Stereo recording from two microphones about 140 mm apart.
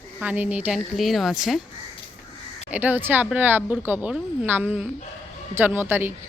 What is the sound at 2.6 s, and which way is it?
A woman's voice, 10° right (ahead or behind).